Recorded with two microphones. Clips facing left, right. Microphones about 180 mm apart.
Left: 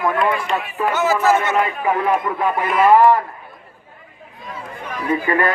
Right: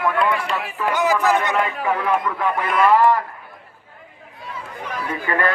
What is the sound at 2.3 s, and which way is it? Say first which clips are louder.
Speech: left 2 dB; 25° left (ahead or behind).